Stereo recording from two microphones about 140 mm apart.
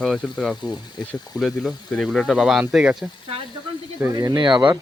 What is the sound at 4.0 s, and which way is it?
Speech, 20° right (ahead or behind).